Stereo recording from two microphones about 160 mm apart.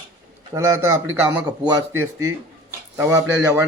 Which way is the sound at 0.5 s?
20° right (ahead or behind).